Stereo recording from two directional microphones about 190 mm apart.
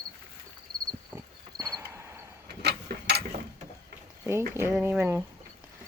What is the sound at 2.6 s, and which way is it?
Mechanisms, 60° right (ahead or behind).